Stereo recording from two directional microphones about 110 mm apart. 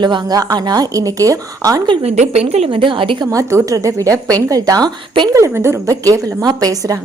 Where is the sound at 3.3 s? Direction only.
30° right (ahead or behind).